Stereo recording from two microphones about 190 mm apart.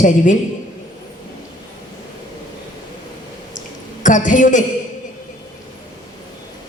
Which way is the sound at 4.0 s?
40° left (ahead or behind).